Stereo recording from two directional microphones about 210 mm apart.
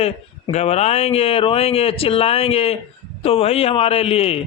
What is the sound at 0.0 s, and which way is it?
Speech, 30° left (ahead or behind).